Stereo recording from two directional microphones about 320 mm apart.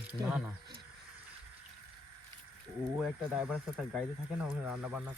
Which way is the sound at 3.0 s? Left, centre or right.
Centre.